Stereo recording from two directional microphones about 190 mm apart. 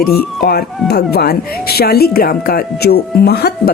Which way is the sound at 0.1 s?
55° left (ahead or behind).